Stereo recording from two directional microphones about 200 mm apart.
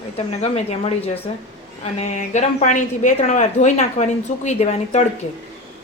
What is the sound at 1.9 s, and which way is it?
Speech, 35° left (ahead or behind).